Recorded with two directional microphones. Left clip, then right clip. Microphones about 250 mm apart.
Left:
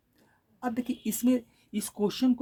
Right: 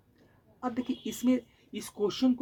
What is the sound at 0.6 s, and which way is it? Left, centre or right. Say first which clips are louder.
Speech: left 1 dB; left.